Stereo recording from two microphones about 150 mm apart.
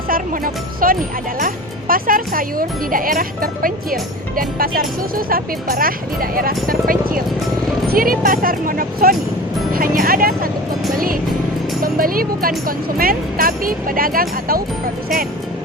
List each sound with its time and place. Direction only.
0.1 s speech: 70° right (ahead or behind)